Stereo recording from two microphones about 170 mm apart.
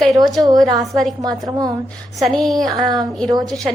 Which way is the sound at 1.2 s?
20° right (ahead or behind).